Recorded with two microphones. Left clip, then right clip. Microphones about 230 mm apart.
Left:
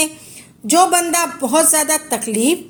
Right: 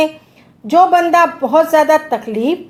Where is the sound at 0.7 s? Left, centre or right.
Left.